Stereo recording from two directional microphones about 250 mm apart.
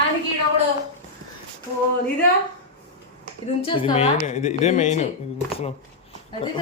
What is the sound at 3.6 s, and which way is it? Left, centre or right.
A woman's voice, left.